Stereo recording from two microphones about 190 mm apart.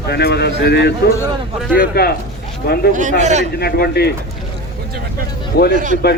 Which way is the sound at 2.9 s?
40° right (ahead or behind).